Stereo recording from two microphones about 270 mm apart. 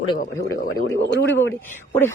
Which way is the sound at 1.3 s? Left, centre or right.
Left.